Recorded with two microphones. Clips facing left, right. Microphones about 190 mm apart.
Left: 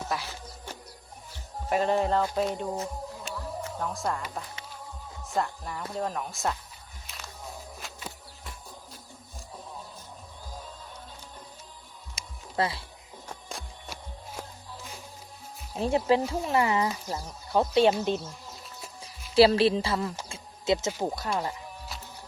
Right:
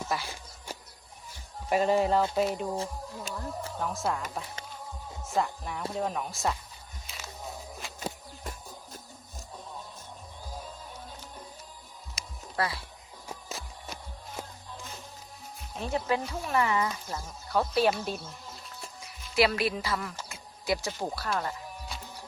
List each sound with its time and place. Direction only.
0.1 s insect: 5° right (ahead or behind)
1.7 s speech: 5° right (ahead or behind)
2.7 s music: 30° right (ahead or behind)
3.8 s speech: centre (ahead or behind)
5.3 s speech: centre (ahead or behind)
7.9 s music: 40° right (ahead or behind)
12.1 s music: 25° left (ahead or behind)
13.2 s music: 5° right (ahead or behind)
15.8 s speech: 30° left (ahead or behind)
19.0 s music: 30° left (ahead or behind)
21.0 s speech: 15° left (ahead or behind)